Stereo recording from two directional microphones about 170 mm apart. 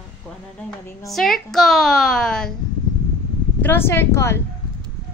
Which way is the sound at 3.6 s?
15° left (ahead or behind).